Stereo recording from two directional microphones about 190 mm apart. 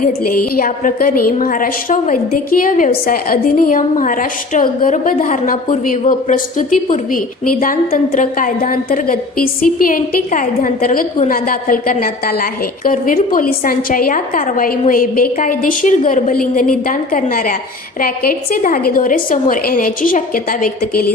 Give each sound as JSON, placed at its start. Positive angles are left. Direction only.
{"t": 0.0, "sound": "a woman's voice", "side_deg": 45}